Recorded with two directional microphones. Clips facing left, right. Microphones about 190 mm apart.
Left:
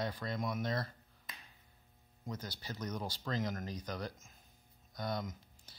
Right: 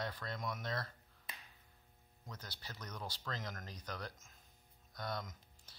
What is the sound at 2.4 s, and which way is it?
Speech, 5° left (ahead or behind).